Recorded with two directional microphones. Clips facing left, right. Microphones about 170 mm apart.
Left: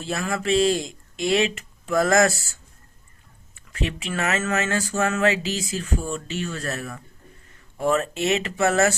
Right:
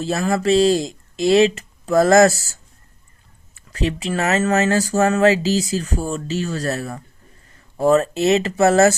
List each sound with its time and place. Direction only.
0.0 s speech: 40° right (ahead or behind)